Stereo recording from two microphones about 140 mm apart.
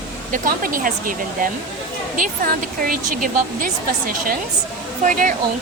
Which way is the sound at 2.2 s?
90° right.